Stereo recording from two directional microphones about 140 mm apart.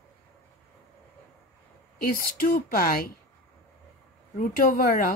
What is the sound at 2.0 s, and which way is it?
Speech, 90° left.